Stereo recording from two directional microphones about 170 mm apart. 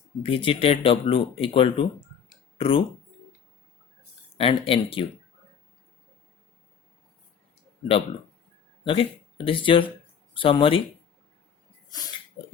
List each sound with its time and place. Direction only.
0.2 s speech: 30° left (ahead or behind)
4.4 s speech: 35° left (ahead or behind)
8.8 s speech: 30° left (ahead or behind)